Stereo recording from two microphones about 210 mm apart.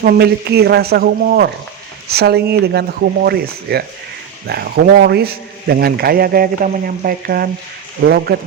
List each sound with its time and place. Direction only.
0.0 s a man's voice: 45° right (ahead or behind)